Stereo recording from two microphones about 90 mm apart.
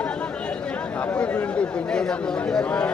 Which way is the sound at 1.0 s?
15° left (ahead or behind).